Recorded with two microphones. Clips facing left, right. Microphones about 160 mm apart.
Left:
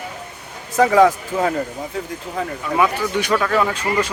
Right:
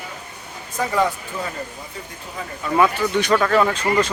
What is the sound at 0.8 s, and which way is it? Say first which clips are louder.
Speech: left 8 dB; 90° left.